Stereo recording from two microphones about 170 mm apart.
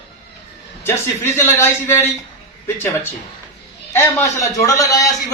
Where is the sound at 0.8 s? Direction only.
15° left (ahead or behind).